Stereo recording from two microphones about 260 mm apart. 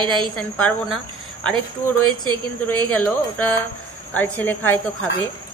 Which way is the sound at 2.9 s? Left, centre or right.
Centre.